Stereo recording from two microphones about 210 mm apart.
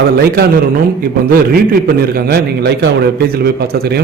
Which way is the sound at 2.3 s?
50° right (ahead or behind).